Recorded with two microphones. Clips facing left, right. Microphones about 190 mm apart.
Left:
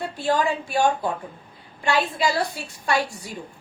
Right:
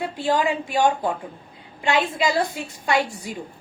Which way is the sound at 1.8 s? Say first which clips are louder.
Right 1 dB; 20° right (ahead or behind).